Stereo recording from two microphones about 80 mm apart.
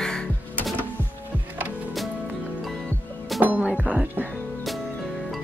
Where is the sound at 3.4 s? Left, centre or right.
Right.